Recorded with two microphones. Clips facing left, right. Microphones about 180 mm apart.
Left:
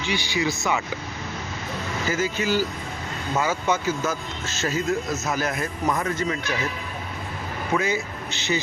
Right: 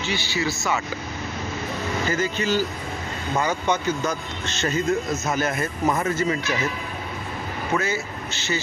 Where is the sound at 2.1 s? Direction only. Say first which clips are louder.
Left 1 dB; 10° left (ahead or behind).